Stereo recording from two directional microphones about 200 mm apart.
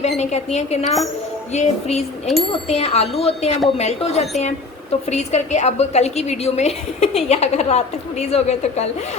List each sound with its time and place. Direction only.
0.0 s a woman's voice: 35° left (ahead or behind)
2.2 s speech: centre (ahead or behind)
2.6 s a woman's voice: 30° left (ahead or behind)